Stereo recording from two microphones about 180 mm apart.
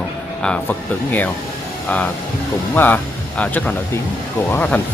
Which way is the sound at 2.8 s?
10° left (ahead or behind).